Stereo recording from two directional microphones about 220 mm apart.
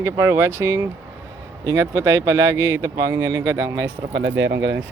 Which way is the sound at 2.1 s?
15° right (ahead or behind).